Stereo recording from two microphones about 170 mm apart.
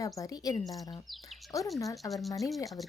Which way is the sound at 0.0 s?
20° left (ahead or behind).